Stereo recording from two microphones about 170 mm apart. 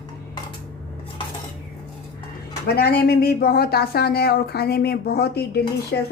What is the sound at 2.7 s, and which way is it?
Speech, 65° left (ahead or behind).